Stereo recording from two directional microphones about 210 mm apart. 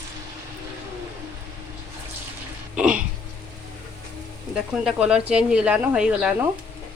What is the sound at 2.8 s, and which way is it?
Throat clearing, 5° right (ahead or behind).